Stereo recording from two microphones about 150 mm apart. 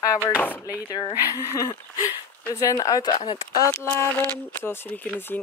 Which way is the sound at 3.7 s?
5° left (ahead or behind).